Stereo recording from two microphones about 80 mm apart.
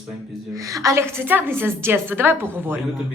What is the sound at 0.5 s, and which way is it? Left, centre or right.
Speech, right.